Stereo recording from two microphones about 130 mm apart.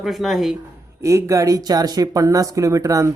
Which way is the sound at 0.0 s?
Centre (ahead or behind).